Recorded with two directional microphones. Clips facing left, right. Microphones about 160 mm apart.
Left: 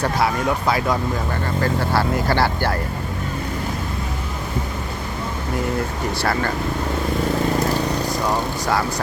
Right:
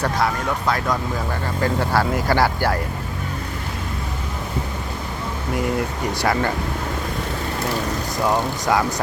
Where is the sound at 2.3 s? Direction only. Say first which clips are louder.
Right 3 dB; 10° right (ahead or behind).